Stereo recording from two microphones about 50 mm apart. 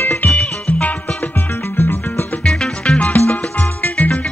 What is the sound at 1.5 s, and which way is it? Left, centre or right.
Music, left.